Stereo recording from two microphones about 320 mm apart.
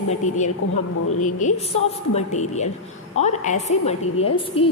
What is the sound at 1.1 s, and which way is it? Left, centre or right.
Speech, left.